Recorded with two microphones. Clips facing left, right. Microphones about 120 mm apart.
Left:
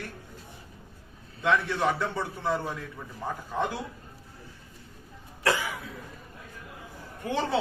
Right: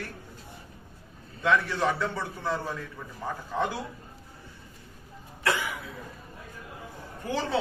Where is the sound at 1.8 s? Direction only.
20° left (ahead or behind).